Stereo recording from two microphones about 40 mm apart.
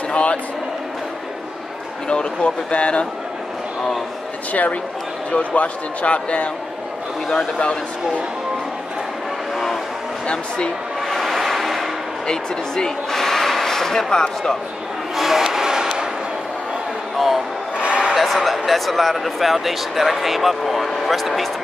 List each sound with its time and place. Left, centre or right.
0.1 s a sound: left
2.0 s speech: left
4.5 s speech: left
10.2 s speech: left
11.1 s vehicle: centre
12.3 s speech: centre
15.1 s a sound: centre
17.7 s a sound: right
18.1 s speech: centre